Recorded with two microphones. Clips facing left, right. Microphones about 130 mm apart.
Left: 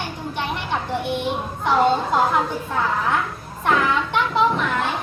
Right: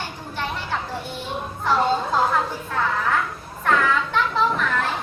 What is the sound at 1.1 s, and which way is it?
Speech, 20° left (ahead or behind).